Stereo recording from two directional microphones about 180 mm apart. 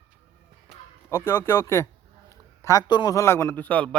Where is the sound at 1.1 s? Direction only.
15° left (ahead or behind).